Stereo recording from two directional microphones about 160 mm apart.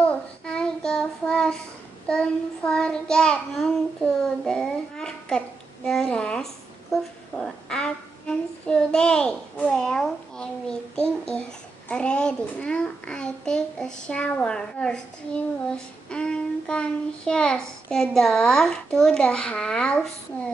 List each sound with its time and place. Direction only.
0.0 s child singing: 5° left (ahead or behind)
2.0 s a child's voice: 5° left (ahead or behind)
5.9 s a sound: 5° left (ahead or behind)
11.0 s child singing: 5° left (ahead or behind)
11.9 s a child's voice: 5° left (ahead or behind)